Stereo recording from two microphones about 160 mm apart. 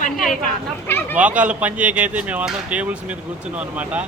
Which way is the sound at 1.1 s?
10° right (ahead or behind).